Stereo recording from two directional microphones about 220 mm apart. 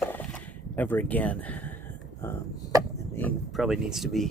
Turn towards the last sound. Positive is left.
turn(degrees=0)  # may be behind; listen again after turning